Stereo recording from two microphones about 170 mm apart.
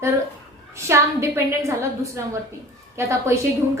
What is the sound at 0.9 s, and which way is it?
A woman's voice, 15° right (ahead or behind).